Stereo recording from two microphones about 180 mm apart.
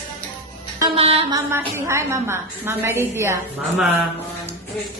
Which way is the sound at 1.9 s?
15° right (ahead or behind).